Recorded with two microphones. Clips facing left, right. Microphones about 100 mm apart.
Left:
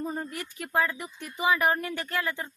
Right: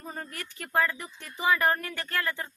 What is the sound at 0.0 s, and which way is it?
Speech, 15° left (ahead or behind).